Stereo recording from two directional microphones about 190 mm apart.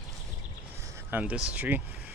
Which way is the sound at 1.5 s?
10° right (ahead or behind).